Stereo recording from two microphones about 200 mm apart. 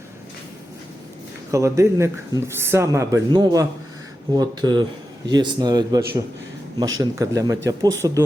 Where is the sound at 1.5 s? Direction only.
15° right (ahead or behind).